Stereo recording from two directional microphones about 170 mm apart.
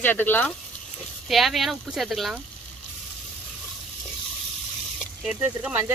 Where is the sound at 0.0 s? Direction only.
10° left (ahead or behind).